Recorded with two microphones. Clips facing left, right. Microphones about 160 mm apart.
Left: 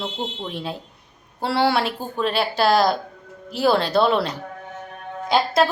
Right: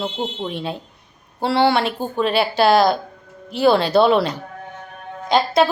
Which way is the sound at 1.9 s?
25° right (ahead or behind).